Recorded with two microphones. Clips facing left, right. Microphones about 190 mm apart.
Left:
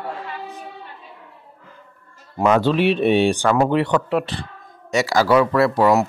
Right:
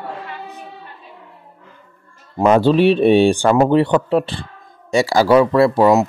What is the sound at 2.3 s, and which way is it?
Speech, 30° right (ahead or behind).